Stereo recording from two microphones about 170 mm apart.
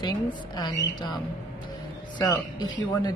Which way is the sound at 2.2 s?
25° left (ahead or behind).